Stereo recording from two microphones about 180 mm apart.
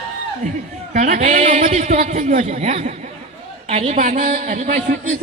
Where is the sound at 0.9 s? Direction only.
40° right (ahead or behind).